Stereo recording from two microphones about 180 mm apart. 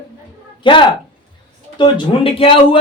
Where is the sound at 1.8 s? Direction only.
30° left (ahead or behind).